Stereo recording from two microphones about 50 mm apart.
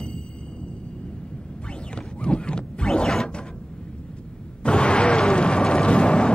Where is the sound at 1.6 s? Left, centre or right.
Centre.